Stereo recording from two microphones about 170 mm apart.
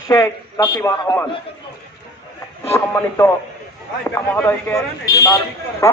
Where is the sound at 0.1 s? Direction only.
20° left (ahead or behind).